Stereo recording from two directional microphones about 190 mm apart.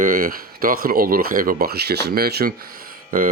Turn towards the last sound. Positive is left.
turn(degrees=-45)  # may be behind; listen again after turning